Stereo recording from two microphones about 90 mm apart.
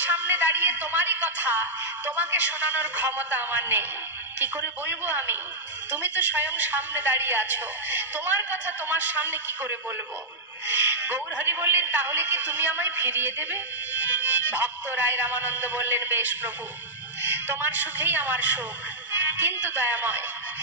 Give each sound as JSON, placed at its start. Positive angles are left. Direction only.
{"t": 0.0, "sound": "a woman's voice", "side_deg": -20}